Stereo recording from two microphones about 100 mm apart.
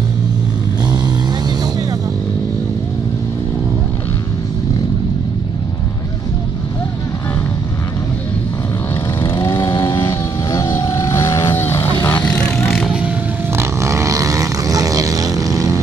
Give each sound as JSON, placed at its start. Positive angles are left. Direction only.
{"t": 9.2, "sound": "vehicle", "side_deg": 25}
{"t": 9.7, "sound": "music", "side_deg": 45}
{"t": 10.0, "sound": "vehicle", "side_deg": 25}
{"t": 13.6, "sound": "vehicle", "side_deg": -30}